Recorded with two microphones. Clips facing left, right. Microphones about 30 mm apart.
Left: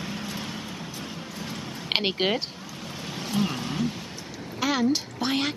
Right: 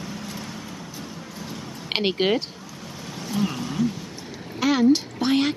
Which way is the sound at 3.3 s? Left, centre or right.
Centre.